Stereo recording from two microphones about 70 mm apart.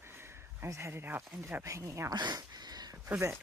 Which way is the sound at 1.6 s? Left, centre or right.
Right.